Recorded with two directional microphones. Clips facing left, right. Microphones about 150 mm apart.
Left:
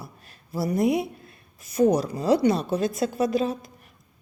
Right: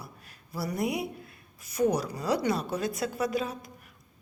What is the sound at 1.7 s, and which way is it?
A woman's voice, 25° left (ahead or behind).